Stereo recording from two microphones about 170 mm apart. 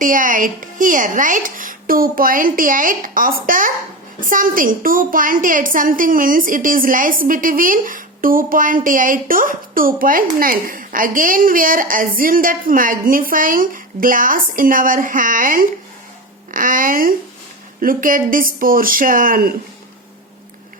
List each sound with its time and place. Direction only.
0.0 s a woman's voice: 50° right (ahead or behind)